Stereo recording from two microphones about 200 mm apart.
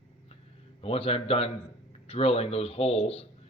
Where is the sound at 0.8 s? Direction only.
30° left (ahead or behind).